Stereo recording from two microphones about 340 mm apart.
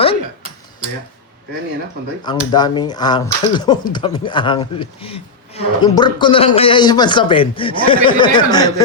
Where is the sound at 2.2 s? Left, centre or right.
Centre.